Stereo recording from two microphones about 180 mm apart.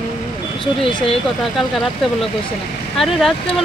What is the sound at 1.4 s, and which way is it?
Speech, centre (ahead or behind).